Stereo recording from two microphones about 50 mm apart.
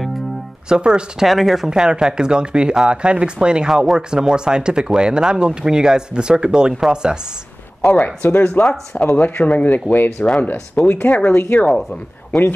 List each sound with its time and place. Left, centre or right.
0.7 s speech: centre
1.2 s speech: centre
1.7 s speech: centre
8.2 s speech: left
10.1 s speech: centre
10.4 s speech: left
11.5 s speech: centre
12.3 s speech: centre